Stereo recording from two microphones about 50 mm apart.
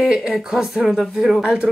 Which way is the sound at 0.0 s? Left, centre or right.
Centre.